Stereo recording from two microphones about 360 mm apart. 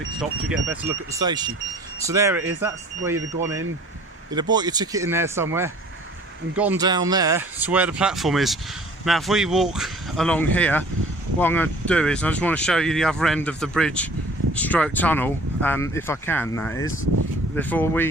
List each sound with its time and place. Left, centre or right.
0.5 s speech: centre
4.5 s speech: centre